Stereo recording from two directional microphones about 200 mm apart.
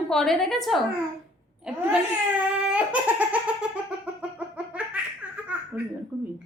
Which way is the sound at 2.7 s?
5° right (ahead or behind).